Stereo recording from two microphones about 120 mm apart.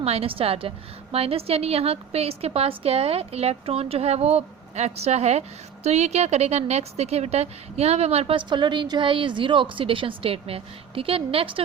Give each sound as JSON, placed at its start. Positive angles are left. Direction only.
{"t": 0.0, "sound": "a woman's voice", "side_deg": -55}
{"t": 8.4, "sound": "a woman's voice", "side_deg": -40}